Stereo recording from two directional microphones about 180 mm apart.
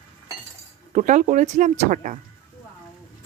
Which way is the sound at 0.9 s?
40° right (ahead or behind).